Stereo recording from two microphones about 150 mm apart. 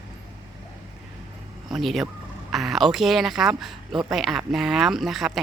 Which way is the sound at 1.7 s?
Centre (ahead or behind).